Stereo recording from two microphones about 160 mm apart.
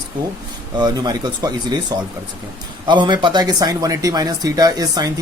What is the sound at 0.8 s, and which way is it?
Speech, 25° right (ahead or behind).